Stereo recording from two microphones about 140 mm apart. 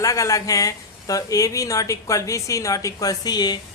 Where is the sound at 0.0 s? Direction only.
25° left (ahead or behind).